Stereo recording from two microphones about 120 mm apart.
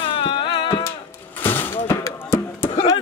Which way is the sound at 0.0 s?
45° left (ahead or behind).